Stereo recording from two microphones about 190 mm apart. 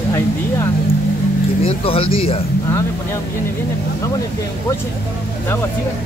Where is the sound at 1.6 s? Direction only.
30° left (ahead or behind).